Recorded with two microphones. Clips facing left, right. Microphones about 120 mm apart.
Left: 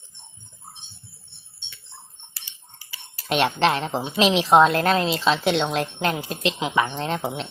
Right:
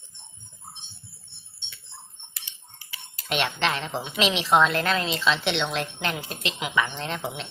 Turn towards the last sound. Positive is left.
turn(degrees=40)  # may be behind; listen again after turning